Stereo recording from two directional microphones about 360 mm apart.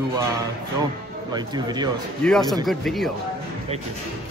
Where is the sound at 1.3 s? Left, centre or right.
Centre.